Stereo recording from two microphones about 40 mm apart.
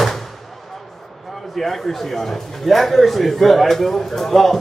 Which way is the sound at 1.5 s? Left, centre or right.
Centre.